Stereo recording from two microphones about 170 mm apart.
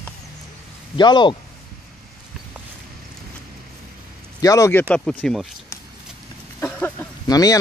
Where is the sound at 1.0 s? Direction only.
25° left (ahead or behind).